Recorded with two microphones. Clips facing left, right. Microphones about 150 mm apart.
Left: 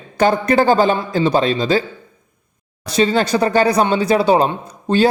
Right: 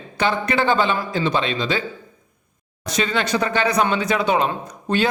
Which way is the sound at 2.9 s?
35° left (ahead or behind).